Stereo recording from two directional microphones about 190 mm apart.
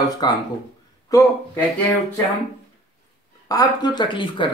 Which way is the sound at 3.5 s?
20° left (ahead or behind).